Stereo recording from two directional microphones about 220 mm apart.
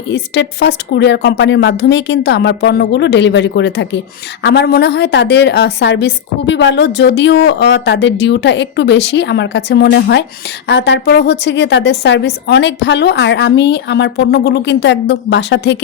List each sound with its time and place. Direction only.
0.1 s a woman's voice: 55° left (ahead or behind)